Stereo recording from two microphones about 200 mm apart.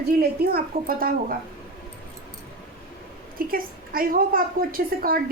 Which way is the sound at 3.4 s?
45° right (ahead or behind).